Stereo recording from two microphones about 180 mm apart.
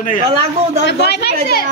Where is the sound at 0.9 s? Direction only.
65° left (ahead or behind).